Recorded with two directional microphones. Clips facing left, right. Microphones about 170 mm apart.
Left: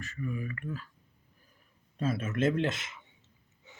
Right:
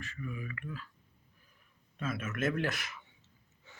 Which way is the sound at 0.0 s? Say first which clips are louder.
Left 5 dB; 40° left (ahead or behind).